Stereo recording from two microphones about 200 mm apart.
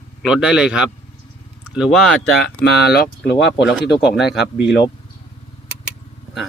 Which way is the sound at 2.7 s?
55° left (ahead or behind).